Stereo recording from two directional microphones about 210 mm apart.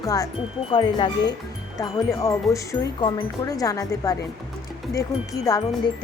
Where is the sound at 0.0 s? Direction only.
15° left (ahead or behind).